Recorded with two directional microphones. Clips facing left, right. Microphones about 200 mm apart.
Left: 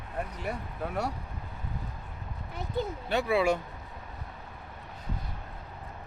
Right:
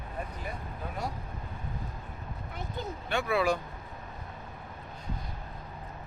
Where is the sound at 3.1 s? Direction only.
30° left (ahead or behind).